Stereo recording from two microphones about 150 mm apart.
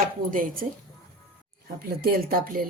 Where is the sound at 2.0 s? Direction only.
80° right.